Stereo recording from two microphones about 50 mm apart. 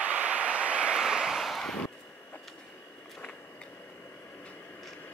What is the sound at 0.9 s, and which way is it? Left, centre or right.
Vehicle, centre.